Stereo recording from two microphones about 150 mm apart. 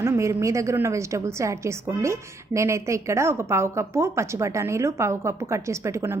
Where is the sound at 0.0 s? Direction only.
20° right (ahead or behind).